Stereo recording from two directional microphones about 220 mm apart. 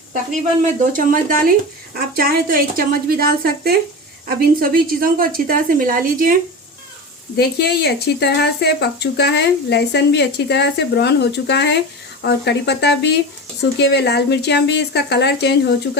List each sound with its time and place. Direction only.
0.6 s a woman's voice: 40° right (ahead or behind)
7.3 s speech: 50° left (ahead or behind)